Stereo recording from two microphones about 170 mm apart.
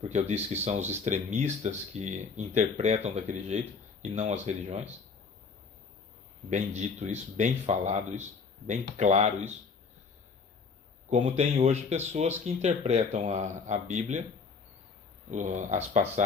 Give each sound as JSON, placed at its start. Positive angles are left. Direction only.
{"t": 0.1, "sound": "speech", "side_deg": -40}
{"t": 6.5, "sound": "speech", "side_deg": -40}
{"t": 11.1, "sound": "speech", "side_deg": -45}
{"t": 15.3, "sound": "speech", "side_deg": -45}